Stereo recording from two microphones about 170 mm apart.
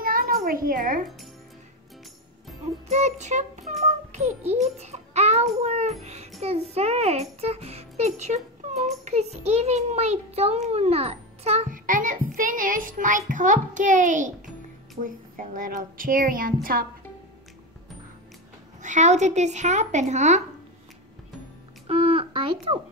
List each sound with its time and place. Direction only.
0.0 s a sound: 60° right (ahead or behind)
0.5 s a woman's voice: 55° right (ahead or behind)
2.9 s a child's voice: 40° right (ahead or behind)
3.8 s music: 40° right (ahead or behind)
5.6 s a child's voice: 40° right (ahead or behind); by 16.5 s 55° right (ahead or behind)
18.8 s a woman's voice: 45° right (ahead or behind)
21.8 s speech: 35° right (ahead or behind)